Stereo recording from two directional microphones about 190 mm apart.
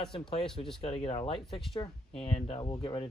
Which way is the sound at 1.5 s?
Centre (ahead or behind).